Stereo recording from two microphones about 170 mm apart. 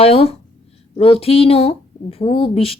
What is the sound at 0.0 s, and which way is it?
Speech, 35° left (ahead or behind).